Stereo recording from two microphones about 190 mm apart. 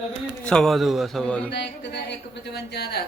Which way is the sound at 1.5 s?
65° left (ahead or behind).